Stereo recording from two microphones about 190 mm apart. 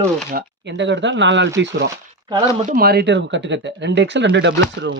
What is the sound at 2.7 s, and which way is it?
Speech, 55° right (ahead or behind).